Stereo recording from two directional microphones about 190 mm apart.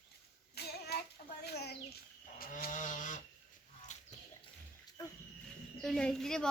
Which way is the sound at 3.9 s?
40° left (ahead or behind).